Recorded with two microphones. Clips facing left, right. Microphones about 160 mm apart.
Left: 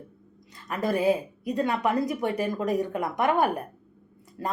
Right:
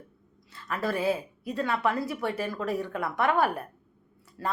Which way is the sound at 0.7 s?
15° left (ahead or behind).